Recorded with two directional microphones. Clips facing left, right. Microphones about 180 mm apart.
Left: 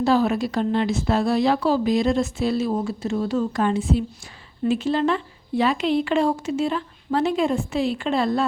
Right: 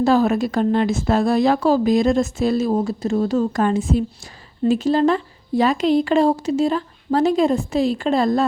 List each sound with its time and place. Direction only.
0.0 s a woman's voice: 45° right (ahead or behind)